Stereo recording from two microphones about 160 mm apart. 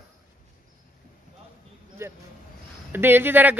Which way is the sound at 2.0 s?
15° right (ahead or behind).